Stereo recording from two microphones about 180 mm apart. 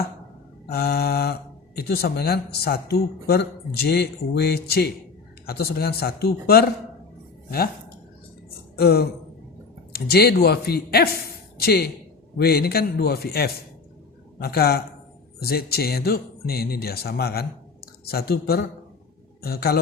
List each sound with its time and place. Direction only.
0.7 s speech: 60° left (ahead or behind)
8.7 s a man's voice: 60° left (ahead or behind)